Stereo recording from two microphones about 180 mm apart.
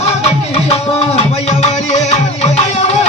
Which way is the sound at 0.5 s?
35° left (ahead or behind).